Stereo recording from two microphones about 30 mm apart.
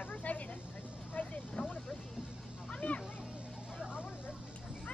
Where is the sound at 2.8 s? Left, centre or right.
Left.